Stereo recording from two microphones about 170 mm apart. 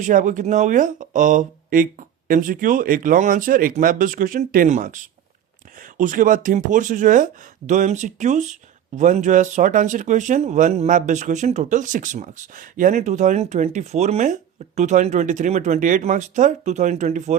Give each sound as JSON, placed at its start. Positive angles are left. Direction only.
{"t": 0.0, "sound": "speech", "side_deg": -50}